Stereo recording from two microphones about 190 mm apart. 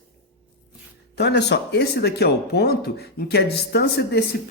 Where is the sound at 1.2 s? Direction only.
60° left (ahead or behind).